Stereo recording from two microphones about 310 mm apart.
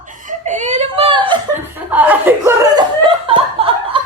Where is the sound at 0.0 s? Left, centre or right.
Right.